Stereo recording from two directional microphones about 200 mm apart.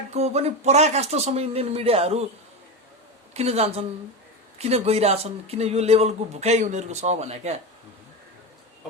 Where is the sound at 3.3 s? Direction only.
30° right (ahead or behind).